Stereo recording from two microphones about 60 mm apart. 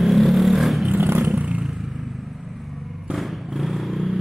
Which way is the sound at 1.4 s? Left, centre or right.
Centre.